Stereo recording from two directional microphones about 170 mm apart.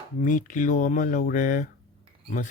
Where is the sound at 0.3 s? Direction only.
50° left (ahead or behind).